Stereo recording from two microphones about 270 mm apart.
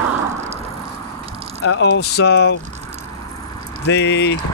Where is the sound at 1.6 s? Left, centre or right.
Left.